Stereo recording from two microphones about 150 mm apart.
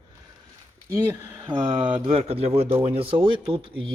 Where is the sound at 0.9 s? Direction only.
15° right (ahead or behind).